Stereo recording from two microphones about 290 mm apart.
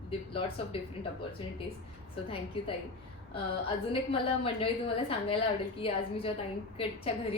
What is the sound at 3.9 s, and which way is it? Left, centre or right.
A woman's voice, centre.